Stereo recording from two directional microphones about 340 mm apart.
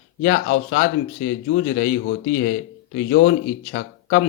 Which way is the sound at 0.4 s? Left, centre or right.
Left.